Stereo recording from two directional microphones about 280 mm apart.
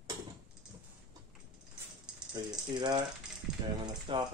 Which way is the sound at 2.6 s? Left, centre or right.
Centre.